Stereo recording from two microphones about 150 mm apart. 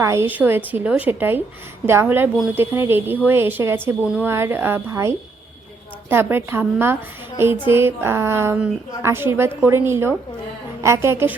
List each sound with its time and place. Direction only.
0.0 s a woman's voice: 20° right (ahead or behind)